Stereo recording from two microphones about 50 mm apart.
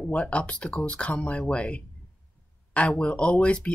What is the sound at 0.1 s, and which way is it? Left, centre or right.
Speech, left.